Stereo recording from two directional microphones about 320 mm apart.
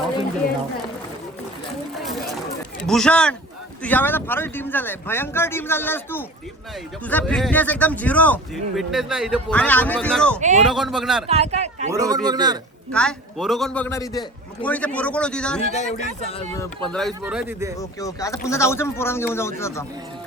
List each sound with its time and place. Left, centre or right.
2.8 s speech: centre
11.3 s a man's voice: centre
12.9 s speech: centre
15.7 s speech: left
16.6 s speech: centre
17.7 s speech: centre